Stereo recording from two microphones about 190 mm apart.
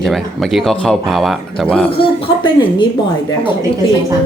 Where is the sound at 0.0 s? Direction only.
Centre (ahead or behind).